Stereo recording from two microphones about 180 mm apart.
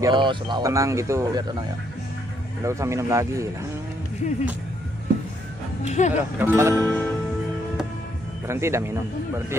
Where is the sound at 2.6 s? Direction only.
15° right (ahead or behind).